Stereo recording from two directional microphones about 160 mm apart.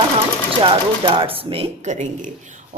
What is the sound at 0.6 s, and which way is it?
Speech, 35° right (ahead or behind).